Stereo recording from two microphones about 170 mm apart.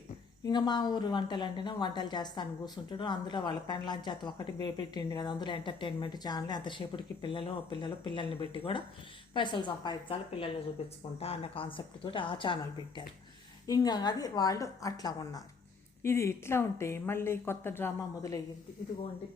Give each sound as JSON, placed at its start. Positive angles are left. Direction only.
{"t": 0.4, "sound": "a woman's voice", "side_deg": 25}